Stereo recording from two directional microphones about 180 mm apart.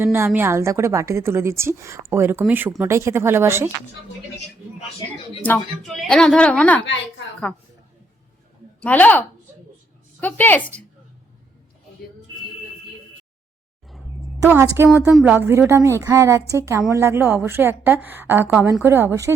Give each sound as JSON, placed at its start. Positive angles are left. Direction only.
{"t": 0.0, "sound": "a woman's voice", "side_deg": -15}
{"t": 5.4, "sound": "a woman's voice", "side_deg": 5}
{"t": 8.8, "sound": "a woman's voice", "side_deg": 10}
{"t": 14.4, "sound": "a woman's voice", "side_deg": -15}